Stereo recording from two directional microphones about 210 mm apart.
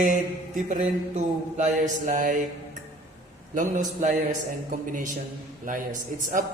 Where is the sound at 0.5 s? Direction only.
35° right (ahead or behind).